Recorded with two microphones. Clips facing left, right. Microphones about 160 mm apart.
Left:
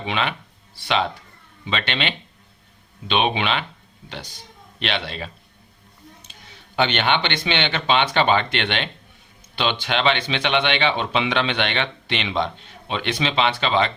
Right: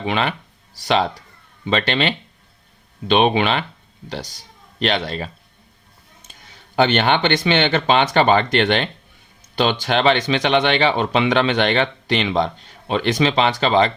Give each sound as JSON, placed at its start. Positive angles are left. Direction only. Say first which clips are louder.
{"t": 0.0, "sound": "speech", "louder": "right 4 dB", "side_deg": -45}
{"t": 6.3, "sound": "a sound", "louder": "even", "side_deg": -45}
{"t": 6.7, "sound": "speech", "louder": "right 4 dB", "side_deg": -40}